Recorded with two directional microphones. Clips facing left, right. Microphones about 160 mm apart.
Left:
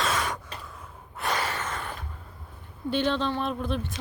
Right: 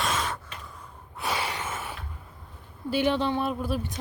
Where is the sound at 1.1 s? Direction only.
5° right (ahead or behind).